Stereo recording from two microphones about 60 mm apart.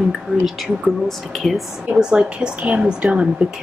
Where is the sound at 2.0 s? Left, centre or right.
Centre.